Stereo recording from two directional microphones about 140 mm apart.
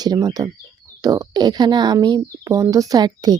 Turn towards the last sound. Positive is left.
turn(degrees=-30)  # may be behind; listen again after turning